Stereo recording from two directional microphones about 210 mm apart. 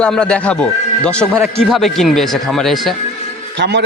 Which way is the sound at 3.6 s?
55° right (ahead or behind).